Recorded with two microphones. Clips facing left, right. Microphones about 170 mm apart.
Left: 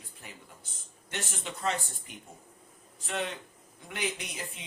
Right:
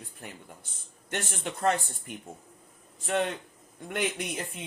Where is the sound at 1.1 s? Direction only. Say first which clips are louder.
Right 4 dB; 55° right (ahead or behind).